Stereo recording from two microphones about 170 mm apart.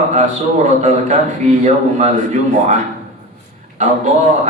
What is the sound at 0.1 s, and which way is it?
A man's voice, 45° right (ahead or behind).